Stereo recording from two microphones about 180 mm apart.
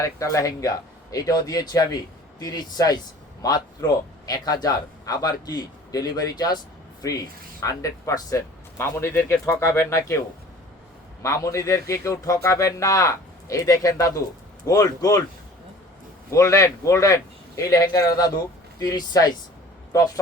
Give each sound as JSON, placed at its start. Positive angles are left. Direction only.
{"t": 0.0, "sound": "a man's voice", "side_deg": 15}
{"t": 11.2, "sound": "a man's voice", "side_deg": 15}
{"t": 16.3, "sound": "a man's voice", "side_deg": 15}